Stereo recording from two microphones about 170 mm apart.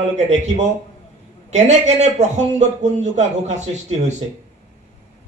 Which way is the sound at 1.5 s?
40° right (ahead or behind).